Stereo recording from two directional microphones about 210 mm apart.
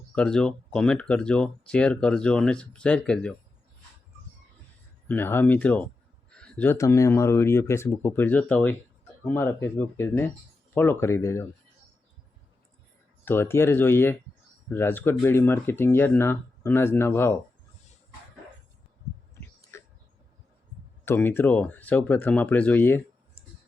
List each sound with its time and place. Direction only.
0.1 s speech: 5° left (ahead or behind)
5.0 s speech: 10° left (ahead or behind)
13.2 s speech: 10° left (ahead or behind)
19.7 s a sound: 15° left (ahead or behind)
21.0 s speech: 10° left (ahead or behind)